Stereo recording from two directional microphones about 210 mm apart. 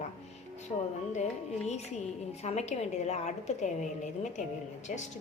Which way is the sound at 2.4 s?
30° left (ahead or behind).